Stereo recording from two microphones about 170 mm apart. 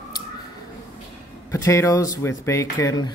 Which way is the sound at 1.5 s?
15° left (ahead or behind).